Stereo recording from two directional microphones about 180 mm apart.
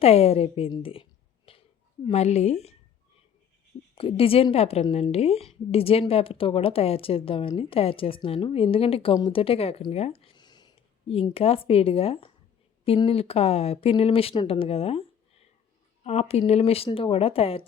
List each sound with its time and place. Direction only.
0.0 s a woman's voice: 35° left (ahead or behind)
1.5 s a sound: 30° left (ahead or behind)
2.0 s a woman's voice: 35° left (ahead or behind)
3.9 s a woman's voice: 30° left (ahead or behind)